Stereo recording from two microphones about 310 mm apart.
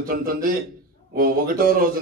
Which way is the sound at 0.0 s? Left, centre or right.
Right.